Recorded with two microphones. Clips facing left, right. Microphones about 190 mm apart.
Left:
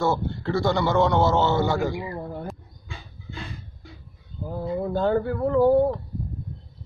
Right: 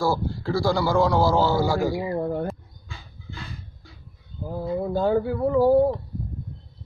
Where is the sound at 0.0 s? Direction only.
Centre (ahead or behind).